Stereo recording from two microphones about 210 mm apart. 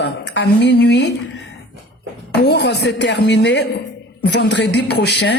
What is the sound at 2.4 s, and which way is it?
A woman's voice, 55° left (ahead or behind).